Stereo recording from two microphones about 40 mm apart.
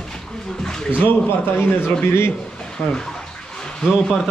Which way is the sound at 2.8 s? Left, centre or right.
Left.